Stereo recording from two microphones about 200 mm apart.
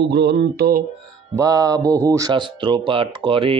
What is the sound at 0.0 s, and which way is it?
Speech, 55° right (ahead or behind).